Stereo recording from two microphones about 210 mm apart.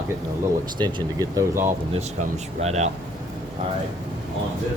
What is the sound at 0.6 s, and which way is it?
Speech, 20° right (ahead or behind).